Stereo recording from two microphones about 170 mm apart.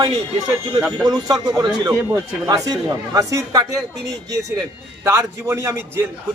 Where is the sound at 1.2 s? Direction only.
25° right (ahead or behind).